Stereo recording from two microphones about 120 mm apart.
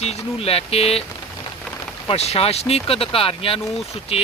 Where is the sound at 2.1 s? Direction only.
55° left (ahead or behind).